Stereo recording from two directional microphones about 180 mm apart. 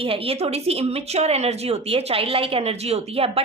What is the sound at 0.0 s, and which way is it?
Speech, 30° right (ahead or behind).